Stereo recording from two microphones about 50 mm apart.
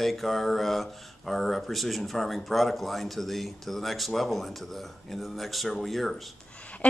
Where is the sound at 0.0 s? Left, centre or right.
Centre.